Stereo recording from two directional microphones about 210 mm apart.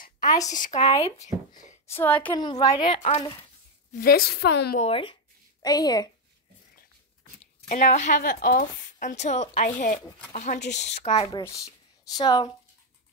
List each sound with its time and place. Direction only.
0.5 s a woman's voice: 35° left (ahead or behind)
1.9 s a woman's voice: 10° left (ahead or behind)
2.3 s a woman's voice: 20° left (ahead or behind)
3.9 s a woman's voice: 45° left (ahead or behind)
4.7 s a woman's voice: 25° left (ahead or behind)
7.6 s a woman's voice: 35° left (ahead or behind); by 9.2 s 50° left (ahead or behind)
9.2 s a woman's voice: 35° left (ahead or behind)
11.1 s a woman's voice: 20° left (ahead or behind)